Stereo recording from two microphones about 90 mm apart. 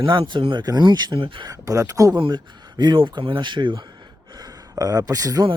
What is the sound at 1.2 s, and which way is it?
Speech, 65° right (ahead or behind).